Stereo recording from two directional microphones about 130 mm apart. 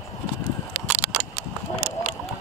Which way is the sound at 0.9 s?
10° right (ahead or behind).